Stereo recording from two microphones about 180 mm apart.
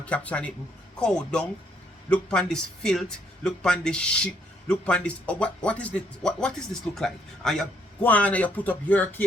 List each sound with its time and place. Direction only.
0.0 s a man's voice: 5° left (ahead or behind)